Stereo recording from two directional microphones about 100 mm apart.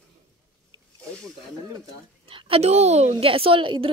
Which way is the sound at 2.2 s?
65° right (ahead or behind).